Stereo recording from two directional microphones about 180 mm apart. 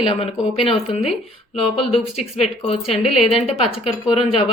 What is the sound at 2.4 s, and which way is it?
Speech, 35° left (ahead or behind).